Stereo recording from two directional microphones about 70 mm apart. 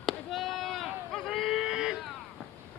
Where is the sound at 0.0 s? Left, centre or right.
Centre.